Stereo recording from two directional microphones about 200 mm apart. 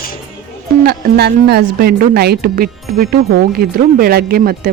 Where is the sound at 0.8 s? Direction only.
50° right (ahead or behind).